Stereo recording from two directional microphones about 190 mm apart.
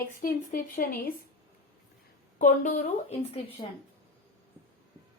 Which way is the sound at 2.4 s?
45° left (ahead or behind).